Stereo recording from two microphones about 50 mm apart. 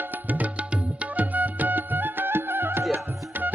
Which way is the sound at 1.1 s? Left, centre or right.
Right.